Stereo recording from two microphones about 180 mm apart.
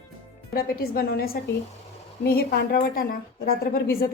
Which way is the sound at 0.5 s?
60° left (ahead or behind).